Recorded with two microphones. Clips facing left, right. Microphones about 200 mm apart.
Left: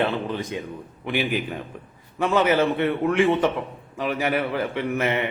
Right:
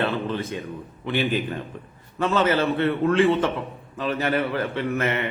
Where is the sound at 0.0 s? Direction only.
15° left (ahead or behind).